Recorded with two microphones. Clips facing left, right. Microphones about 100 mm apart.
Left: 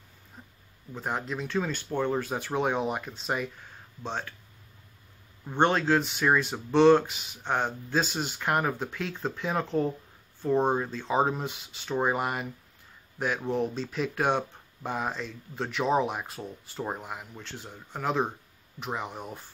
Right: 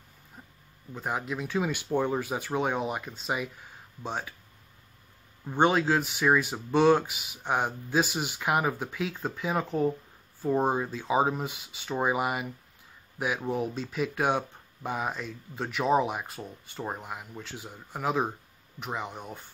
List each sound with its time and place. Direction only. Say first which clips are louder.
0.4 s a sound: even; 5° right (ahead or behind)
0.9 s speech: even; 5° right (ahead or behind)
5.5 s speech: even; 5° right (ahead or behind)